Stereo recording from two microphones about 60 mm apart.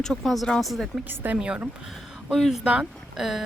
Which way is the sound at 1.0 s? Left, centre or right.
Right.